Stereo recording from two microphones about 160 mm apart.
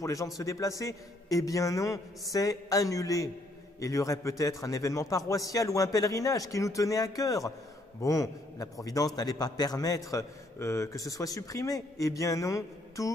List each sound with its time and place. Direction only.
0.0 s a man's voice: 20° left (ahead or behind)